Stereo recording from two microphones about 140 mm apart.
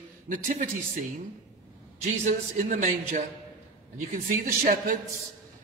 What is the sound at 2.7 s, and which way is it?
A man's voice, 65° right (ahead or behind).